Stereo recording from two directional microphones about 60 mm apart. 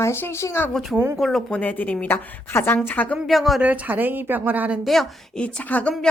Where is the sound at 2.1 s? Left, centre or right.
Left.